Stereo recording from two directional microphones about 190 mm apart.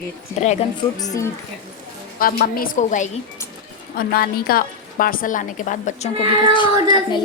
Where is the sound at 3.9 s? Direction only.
55° left (ahead or behind).